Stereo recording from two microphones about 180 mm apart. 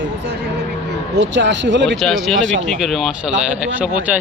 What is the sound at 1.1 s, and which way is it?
Speech, 75° right (ahead or behind).